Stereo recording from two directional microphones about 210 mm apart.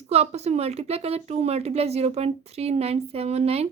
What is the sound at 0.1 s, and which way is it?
A woman's voice, 30° right (ahead or behind).